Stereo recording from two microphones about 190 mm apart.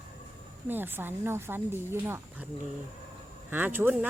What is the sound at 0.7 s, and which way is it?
Speech, 10° right (ahead or behind).